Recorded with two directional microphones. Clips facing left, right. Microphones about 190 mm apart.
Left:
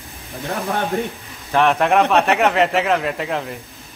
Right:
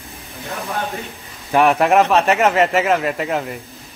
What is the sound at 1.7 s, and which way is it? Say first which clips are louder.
A man's voice: right 1 dB; centre (ahead or behind).